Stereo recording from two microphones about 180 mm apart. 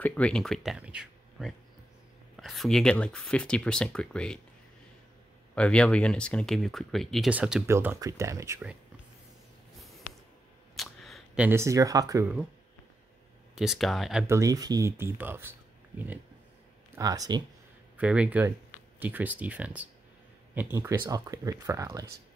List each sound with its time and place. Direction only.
0.0 s speech: 5° left (ahead or behind)
5.5 s speech: 5° left (ahead or behind); by 8.7 s 15° right (ahead or behind)
10.8 s speech: centre (ahead or behind); by 12.3 s 20° right (ahead or behind)
13.6 s speech: centre (ahead or behind)
14.2 s speech: 15° right (ahead or behind)
16.9 s speech: 20° right (ahead or behind)
17.9 s speech: 5° right (ahead or behind)